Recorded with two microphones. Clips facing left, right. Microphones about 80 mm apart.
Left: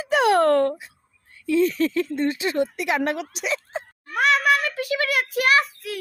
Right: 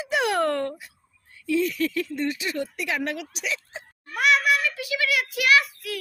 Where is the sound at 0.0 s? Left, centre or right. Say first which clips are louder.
Left 6 dB; left.